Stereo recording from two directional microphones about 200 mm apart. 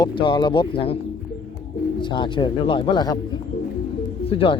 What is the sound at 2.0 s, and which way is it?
Speech, 25° left (ahead or behind).